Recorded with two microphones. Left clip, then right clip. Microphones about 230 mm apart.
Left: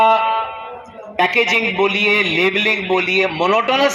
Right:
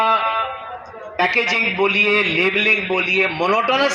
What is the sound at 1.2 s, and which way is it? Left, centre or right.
A man's voice, left.